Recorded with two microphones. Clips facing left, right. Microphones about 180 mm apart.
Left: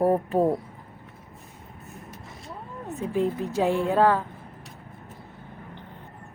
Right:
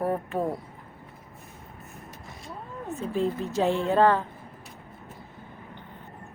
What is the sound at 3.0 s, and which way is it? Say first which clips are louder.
A woman's voice: left 2 dB; 15° left (ahead or behind).